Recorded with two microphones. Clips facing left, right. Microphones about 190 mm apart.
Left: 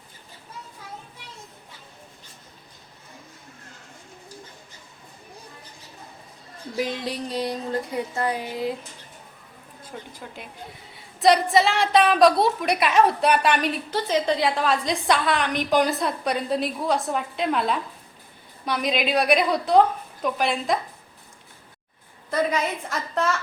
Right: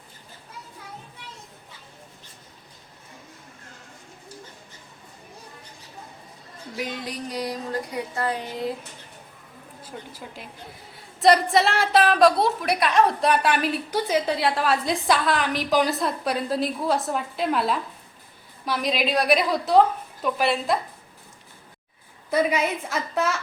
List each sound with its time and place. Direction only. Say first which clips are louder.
7.0 s music: left 3 dB; 30° left (ahead or behind)
8.4 s a woman's voice: left 1 dB; centre (ahead or behind)
9.9 s a woman's voice: left 1 dB; 5° right (ahead or behind)
22.3 s a woman's voice: right 2 dB; 10° right (ahead or behind)